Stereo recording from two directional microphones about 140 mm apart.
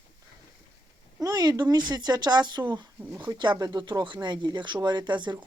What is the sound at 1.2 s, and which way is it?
Speech, 30° right (ahead or behind).